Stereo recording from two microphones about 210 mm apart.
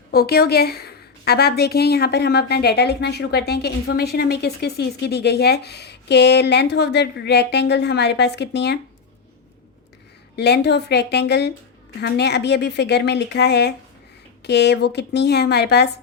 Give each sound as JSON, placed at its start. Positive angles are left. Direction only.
{"t": 0.1, "sound": "a woman's voice", "side_deg": 45}
{"t": 10.3, "sound": "a woman's voice", "side_deg": 50}